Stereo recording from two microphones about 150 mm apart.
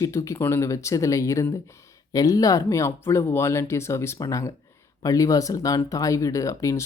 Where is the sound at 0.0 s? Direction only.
20° left (ahead or behind).